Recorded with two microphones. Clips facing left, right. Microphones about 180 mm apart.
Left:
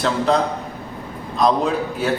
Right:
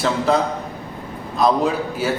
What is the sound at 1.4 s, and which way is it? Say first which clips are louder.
Speech: even; 5° right (ahead or behind).